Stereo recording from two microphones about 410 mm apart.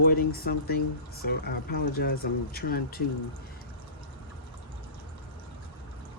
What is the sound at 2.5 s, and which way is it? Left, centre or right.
Speech, left.